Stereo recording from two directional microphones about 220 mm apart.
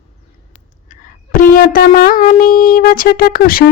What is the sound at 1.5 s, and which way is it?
Speech, 40° left (ahead or behind).